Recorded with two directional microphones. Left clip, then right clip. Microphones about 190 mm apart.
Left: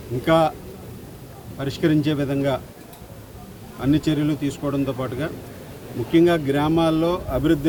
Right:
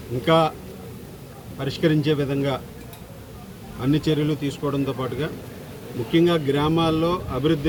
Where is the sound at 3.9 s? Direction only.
20° left (ahead or behind).